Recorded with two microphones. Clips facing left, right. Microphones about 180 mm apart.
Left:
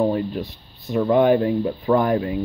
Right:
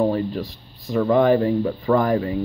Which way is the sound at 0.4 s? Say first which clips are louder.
Even; 90° right.